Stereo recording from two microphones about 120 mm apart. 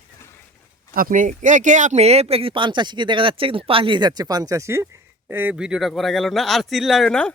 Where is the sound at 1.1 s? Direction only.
90° right; by 4.8 s 25° right (ahead or behind).